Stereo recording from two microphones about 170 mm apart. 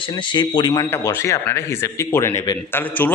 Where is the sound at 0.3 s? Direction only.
25° left (ahead or behind).